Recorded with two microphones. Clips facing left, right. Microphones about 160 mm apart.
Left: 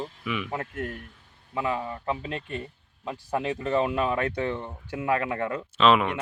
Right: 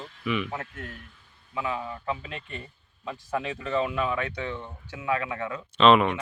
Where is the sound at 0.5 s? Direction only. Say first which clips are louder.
Left 5 dB; 50° left (ahead or behind).